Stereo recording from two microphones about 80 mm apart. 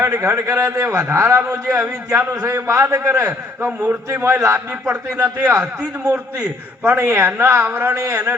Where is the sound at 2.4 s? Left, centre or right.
Right.